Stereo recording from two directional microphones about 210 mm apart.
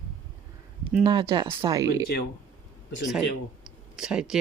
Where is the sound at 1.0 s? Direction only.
20° right (ahead or behind).